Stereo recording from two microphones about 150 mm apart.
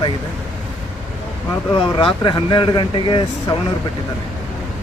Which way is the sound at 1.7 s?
35° left (ahead or behind).